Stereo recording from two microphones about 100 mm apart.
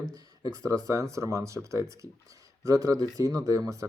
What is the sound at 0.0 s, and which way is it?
Speech, 35° right (ahead or behind).